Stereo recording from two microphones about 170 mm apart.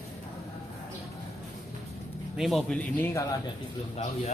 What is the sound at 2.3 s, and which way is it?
Speech, centre (ahead or behind).